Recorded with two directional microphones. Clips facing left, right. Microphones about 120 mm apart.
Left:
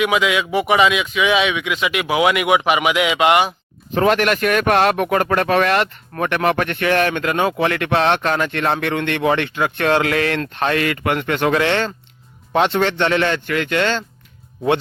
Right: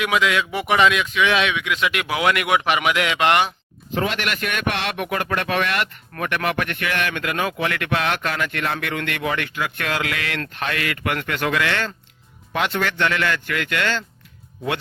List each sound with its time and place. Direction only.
0.0 s speech: 5° left (ahead or behind)
3.9 s a man's voice: 45° left (ahead or behind); by 14.0 s 25° left (ahead or behind)